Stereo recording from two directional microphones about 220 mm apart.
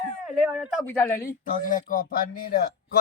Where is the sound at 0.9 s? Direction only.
10° left (ahead or behind).